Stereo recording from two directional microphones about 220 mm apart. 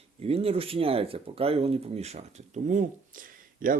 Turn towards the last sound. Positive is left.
turn(degrees=-40)  # may be behind; listen again after turning